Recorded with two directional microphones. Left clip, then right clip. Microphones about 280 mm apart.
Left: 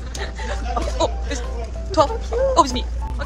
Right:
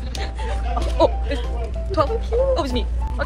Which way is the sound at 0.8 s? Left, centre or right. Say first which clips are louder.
Left 3 dB; left.